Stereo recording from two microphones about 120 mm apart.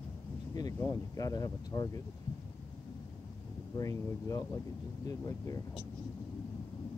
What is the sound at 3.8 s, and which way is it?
Speech, 25° left (ahead or behind).